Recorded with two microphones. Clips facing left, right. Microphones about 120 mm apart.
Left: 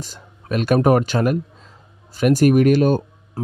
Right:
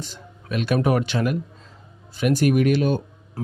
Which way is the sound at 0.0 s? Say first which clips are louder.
Even; 45° left (ahead or behind).